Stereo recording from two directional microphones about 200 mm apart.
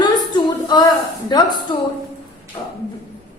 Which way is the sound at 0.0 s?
20° left (ahead or behind).